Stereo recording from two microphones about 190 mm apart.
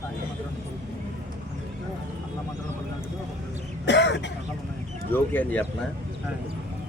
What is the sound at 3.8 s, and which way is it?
Throat clearing, 65° left (ahead or behind).